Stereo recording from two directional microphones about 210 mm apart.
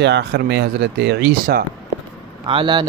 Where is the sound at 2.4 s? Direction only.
25° right (ahead or behind).